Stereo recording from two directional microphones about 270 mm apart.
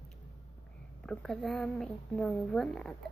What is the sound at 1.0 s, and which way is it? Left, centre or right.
A woman's voice, centre.